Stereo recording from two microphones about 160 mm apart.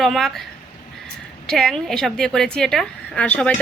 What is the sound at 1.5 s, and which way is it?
A woman's voice, 5° left (ahead or behind).